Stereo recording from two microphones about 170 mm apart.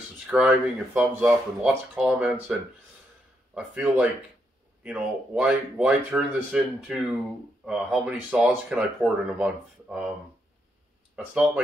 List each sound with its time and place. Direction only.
0.3 s speech: 5° right (ahead or behind)
3.5 s speech: 5° right (ahead or behind)
11.1 s speech: 5° right (ahead or behind)